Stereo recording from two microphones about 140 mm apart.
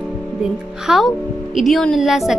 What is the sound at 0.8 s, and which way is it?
A woman's voice, centre (ahead or behind).